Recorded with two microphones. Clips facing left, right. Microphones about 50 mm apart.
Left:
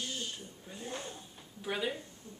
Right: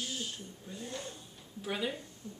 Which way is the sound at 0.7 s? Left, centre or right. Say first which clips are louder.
Left 1 dB; centre.